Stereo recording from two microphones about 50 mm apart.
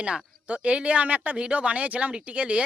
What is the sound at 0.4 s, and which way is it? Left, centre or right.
Speech, right.